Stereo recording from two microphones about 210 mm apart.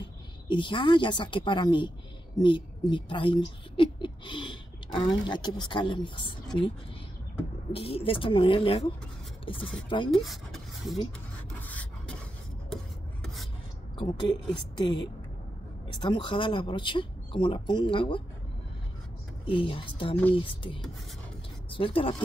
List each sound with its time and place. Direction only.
0.0 s a woman's voice: 25° left (ahead or behind)
7.7 s speech: 25° left (ahead or behind)
10.1 s speech: centre (ahead or behind)
11.6 s filing: 5° left (ahead or behind)
13.2 s filing: centre (ahead or behind)
13.9 s a woman's voice: 20° left (ahead or behind)
19.4 s speech: 25° left (ahead or behind)
21.6 s speech: 25° left (ahead or behind)